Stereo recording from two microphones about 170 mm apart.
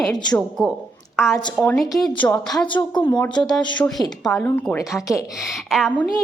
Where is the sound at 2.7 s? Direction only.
25° left (ahead or behind).